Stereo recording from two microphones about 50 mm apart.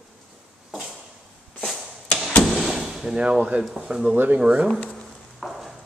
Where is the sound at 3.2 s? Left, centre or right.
Centre.